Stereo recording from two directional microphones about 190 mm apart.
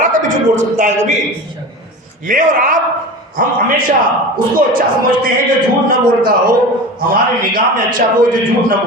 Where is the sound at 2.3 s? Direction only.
45° right (ahead or behind).